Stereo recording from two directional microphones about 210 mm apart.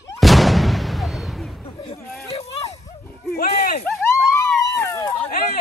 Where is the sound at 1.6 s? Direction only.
25° left (ahead or behind).